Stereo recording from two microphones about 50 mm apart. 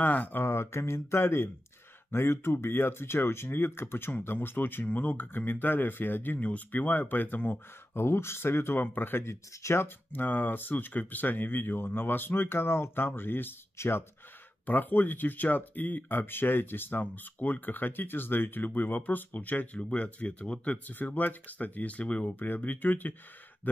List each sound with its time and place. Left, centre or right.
0.0 s speech: left
0.4 s speech: left
7.9 s speech: left
9.3 s speech: left
10.1 s speech: left
14.7 s speech: left
23.6 s a sound: left